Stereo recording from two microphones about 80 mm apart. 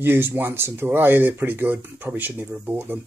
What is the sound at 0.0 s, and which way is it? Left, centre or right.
Speech, right.